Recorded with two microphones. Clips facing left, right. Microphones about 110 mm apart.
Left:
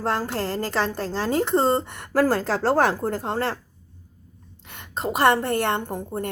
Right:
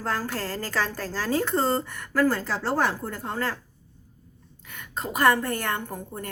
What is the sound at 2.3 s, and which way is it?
Speech, 90° left.